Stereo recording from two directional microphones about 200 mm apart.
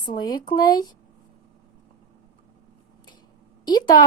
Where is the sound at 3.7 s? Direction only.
20° left (ahead or behind).